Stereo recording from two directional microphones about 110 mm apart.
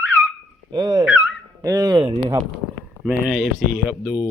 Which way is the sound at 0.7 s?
40° right (ahead or behind).